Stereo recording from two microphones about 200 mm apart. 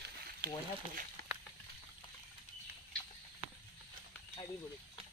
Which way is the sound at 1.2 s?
55° right (ahead or behind).